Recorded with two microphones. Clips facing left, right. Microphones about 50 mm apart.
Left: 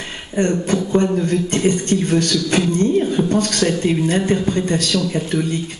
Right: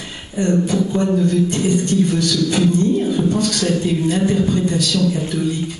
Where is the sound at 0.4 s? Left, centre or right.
Left.